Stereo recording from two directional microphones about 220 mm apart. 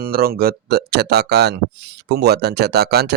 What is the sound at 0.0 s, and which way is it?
Speech, 45° right (ahead or behind).